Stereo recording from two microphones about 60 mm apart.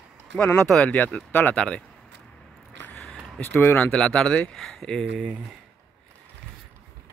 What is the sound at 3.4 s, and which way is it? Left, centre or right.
Speech, left.